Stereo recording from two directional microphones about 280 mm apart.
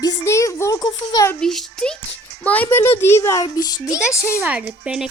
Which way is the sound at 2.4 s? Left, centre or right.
Centre.